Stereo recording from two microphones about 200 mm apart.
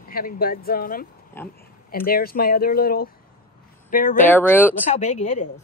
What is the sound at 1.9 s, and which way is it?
A woman's voice, 45° left (ahead or behind).